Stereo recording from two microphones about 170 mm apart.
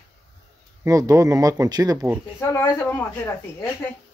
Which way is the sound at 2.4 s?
15° left (ahead or behind).